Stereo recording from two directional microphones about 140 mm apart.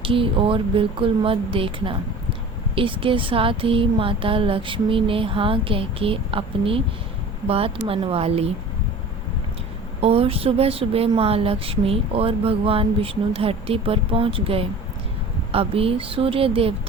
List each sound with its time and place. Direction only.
0.0 s a woman's voice: 40° right (ahead or behind)
10.0 s a woman's voice: 45° right (ahead or behind)